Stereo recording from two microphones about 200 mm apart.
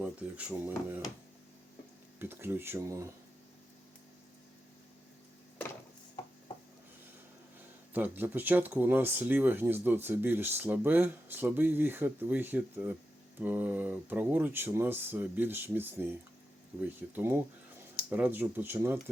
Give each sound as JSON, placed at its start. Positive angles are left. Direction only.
{"t": 0.0, "sound": "speech", "side_deg": -5}
{"t": 2.1, "sound": "speech", "side_deg": -10}
{"t": 7.9, "sound": "speech", "side_deg": -10}